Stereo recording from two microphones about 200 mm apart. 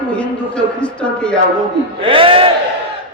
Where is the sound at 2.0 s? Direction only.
25° right (ahead or behind).